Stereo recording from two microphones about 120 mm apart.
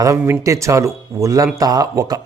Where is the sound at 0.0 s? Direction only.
25° right (ahead or behind).